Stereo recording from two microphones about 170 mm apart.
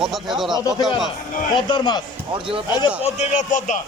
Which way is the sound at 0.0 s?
Centre (ahead or behind).